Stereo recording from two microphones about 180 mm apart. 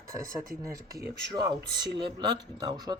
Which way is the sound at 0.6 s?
15° right (ahead or behind).